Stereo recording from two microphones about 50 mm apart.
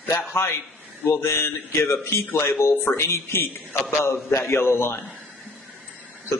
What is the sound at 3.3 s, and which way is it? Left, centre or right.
Speech, left.